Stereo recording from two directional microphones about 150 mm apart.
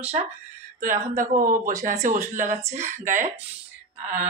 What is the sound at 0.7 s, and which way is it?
Speech, 65° right (ahead or behind).